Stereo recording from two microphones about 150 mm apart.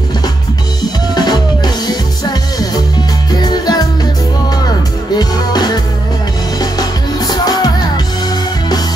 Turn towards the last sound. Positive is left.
turn(degrees=25)  # may be behind; listen again after turning